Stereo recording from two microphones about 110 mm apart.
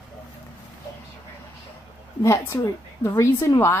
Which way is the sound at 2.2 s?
30° left (ahead or behind).